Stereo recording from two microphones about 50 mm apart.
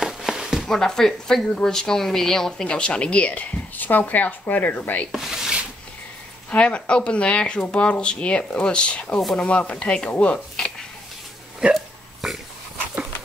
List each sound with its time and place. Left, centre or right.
0.0 s a sound: centre
0.7 s speech: centre
2.5 s speech: centre
5.1 s rub: centre
6.5 s speech: left
9.1 s speech: centre
9.4 s speech: left
10.3 s a sound: centre
11.7 s burping: centre